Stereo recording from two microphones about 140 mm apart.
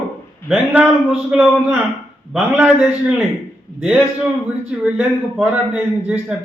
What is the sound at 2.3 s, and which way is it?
Speech, 5° right (ahead or behind).